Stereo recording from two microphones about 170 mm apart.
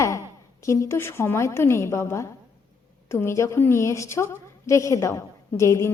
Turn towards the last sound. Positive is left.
turn(degrees=15)  # may be behind; listen again after turning